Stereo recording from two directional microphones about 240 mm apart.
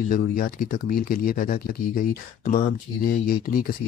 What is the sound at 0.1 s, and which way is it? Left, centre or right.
Speech, left.